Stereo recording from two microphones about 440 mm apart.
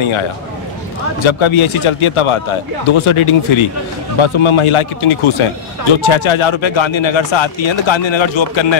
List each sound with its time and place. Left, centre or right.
1.2 s speech: left